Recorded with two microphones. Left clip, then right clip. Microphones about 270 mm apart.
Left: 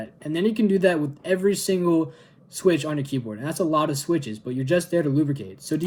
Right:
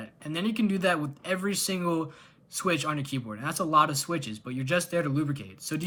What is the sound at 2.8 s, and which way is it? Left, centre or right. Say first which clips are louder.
Speech: left 3 dB; centre.